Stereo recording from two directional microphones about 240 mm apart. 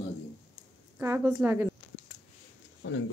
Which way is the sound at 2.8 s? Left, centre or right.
Left.